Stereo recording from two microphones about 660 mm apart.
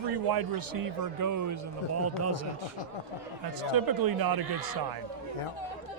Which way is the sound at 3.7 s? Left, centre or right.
Right.